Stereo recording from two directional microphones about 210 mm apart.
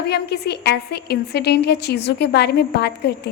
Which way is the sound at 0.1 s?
50° left (ahead or behind).